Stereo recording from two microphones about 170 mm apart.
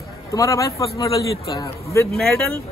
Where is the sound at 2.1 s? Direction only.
5° left (ahead or behind).